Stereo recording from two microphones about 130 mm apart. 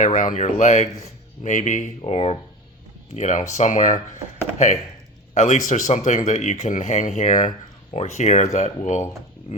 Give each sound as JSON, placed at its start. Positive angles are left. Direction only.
{"t": 0.0, "sound": "speech", "side_deg": 80}
{"t": 3.2, "sound": "speech", "side_deg": 70}